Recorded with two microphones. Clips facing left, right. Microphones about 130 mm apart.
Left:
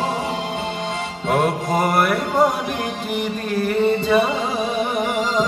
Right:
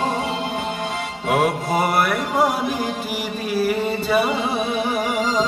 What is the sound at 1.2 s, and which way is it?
Music, 5° right (ahead or behind).